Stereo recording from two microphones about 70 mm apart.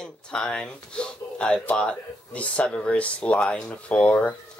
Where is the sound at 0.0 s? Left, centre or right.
Centre.